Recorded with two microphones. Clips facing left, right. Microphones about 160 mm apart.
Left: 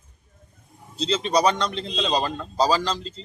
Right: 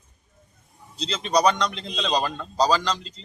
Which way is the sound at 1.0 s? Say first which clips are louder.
Left 6 dB; 30° left (ahead or behind).